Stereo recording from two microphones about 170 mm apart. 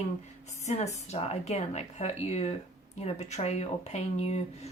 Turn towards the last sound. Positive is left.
turn(degrees=40)  # may be behind; listen again after turning